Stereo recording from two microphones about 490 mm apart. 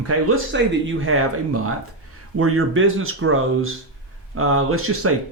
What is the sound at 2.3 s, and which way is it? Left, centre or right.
Speech, right.